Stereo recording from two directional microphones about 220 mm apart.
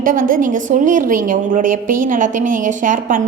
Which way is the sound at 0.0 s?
40° right (ahead or behind).